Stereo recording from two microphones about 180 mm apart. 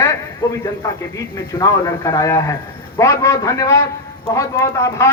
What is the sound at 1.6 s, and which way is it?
A man's voice, 20° left (ahead or behind).